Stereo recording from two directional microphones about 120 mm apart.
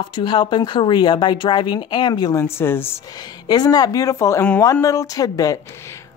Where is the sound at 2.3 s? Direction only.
20° left (ahead or behind).